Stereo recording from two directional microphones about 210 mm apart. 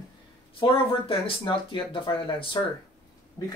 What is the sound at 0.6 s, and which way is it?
Speech, 25° left (ahead or behind).